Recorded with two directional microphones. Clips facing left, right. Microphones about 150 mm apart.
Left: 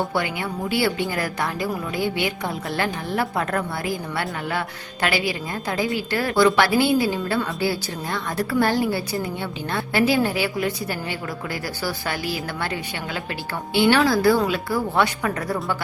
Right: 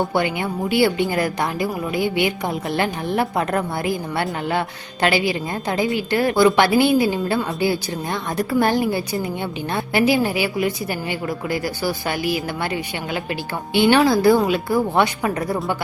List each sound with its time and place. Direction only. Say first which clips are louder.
0.0 s a woman's voice: right 4 dB; 20° right (ahead or behind)
13.7 s a woman's voice: right 3 dB; 20° right (ahead or behind)